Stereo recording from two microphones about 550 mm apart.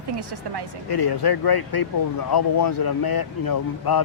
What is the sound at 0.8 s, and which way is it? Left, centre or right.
Speech, left.